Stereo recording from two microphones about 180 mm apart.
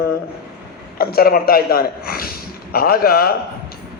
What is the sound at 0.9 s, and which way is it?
Speech, 55° left (ahead or behind).